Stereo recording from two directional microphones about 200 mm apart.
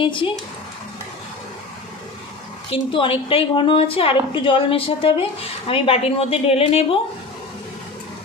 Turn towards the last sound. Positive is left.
turn(degrees=30)  # may be behind; listen again after turning